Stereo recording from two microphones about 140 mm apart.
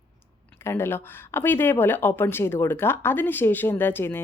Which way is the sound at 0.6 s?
20° left (ahead or behind).